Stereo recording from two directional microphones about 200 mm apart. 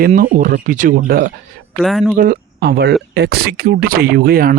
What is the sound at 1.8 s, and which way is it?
Speech, centre (ahead or behind).